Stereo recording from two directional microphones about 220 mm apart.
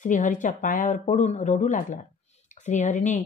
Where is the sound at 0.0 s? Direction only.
35° left (ahead or behind).